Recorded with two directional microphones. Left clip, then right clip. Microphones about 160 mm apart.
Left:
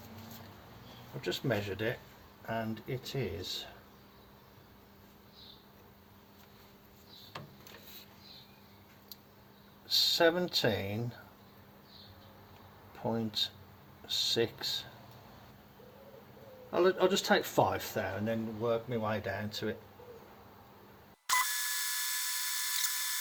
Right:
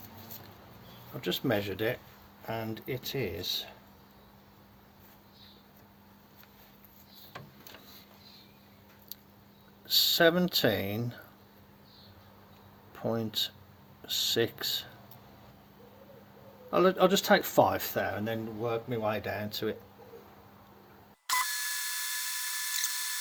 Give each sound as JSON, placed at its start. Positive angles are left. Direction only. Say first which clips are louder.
{"t": 1.2, "sound": "speech", "louder": "right 4 dB", "side_deg": -90}
{"t": 9.8, "sound": "speech", "louder": "right 3 dB", "side_deg": -65}
{"t": 13.0, "sound": "speech", "louder": "right 2 dB", "side_deg": -65}
{"t": 16.7, "sound": "speech", "louder": "right 4 dB", "side_deg": -90}
{"t": 18.9, "sound": "speech", "louder": "right 3 dB", "side_deg": -90}
{"t": 21.2, "sound": "drill", "louder": "right 1 dB", "side_deg": 0}